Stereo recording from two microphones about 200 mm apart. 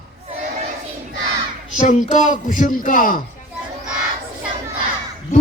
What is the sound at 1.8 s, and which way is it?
A man's voice, 40° left (ahead or behind).